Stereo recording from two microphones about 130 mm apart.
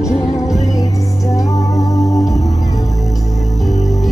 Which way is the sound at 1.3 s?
25° left (ahead or behind).